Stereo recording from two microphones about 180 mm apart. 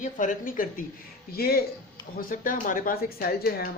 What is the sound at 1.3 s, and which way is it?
A woman's voice, 60° left (ahead or behind).